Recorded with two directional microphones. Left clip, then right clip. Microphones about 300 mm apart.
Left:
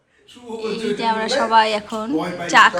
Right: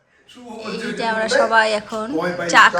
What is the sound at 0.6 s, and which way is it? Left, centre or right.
Speech, centre.